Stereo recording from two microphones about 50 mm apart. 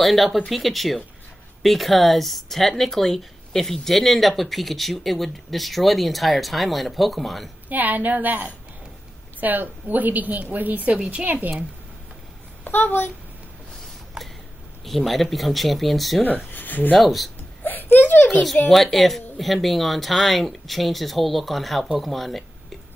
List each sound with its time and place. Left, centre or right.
0.0 s speech: centre
7.7 s a woman's voice: right
11.0 s speech: right
11.2 s a woman's voice: right
12.6 s speech: left
14.9 s speech: centre
16.5 s speech: left
17.0 s speech: centre
17.6 s speech: left
18.7 s speech: centre